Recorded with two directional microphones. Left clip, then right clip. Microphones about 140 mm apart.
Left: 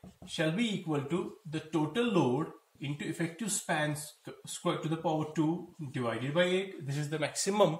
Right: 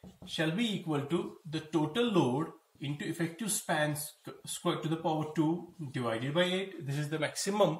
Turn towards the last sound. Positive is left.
turn(degrees=25)  # may be behind; listen again after turning